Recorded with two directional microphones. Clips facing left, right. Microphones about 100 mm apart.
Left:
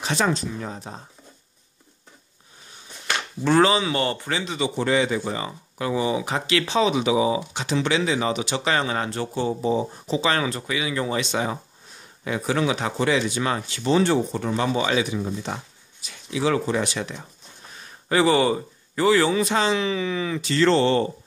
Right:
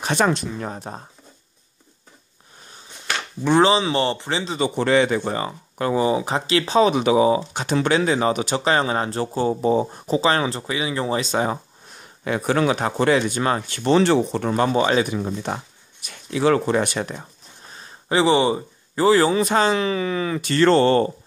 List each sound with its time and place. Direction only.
0.0 s speech: 55° right (ahead or behind)
3.4 s speech: 25° right (ahead or behind)
4.6 s speech: 55° right (ahead or behind)
10.2 s speech: 30° right (ahead or behind)
12.3 s speech: 55° right (ahead or behind)
15.0 s speech: 55° right (ahead or behind)
17.7 s a sound: 25° right (ahead or behind)
19.0 s speech: 35° right (ahead or behind)